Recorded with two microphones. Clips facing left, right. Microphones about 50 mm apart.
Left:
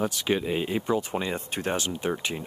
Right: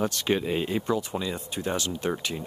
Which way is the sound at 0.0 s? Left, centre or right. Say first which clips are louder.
Even; centre.